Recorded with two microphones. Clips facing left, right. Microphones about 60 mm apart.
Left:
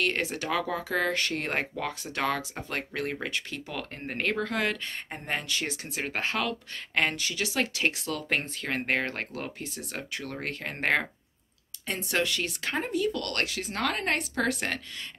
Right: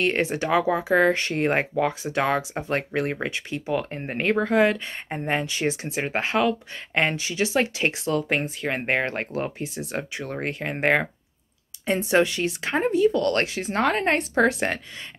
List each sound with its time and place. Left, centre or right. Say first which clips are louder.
0.0 s speech: right 6 dB; right
8.2 s speech: right 5 dB; centre